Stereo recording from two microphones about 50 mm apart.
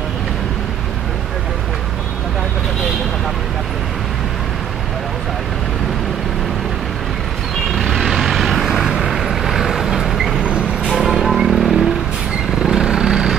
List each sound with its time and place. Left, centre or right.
7.7 s vehicle: centre
10.4 s vehicle: right
10.9 s music: centre
11.2 s vehicle: centre